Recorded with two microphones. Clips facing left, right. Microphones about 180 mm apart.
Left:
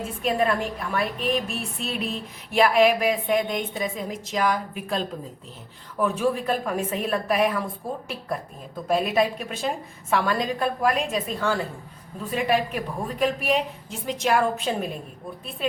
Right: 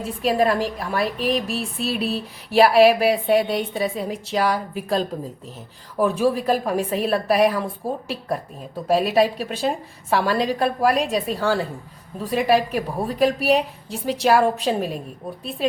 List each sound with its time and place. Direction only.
0.3 s a woman's voice: 35° right (ahead or behind)